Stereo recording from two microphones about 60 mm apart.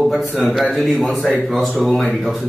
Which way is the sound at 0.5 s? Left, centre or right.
Centre.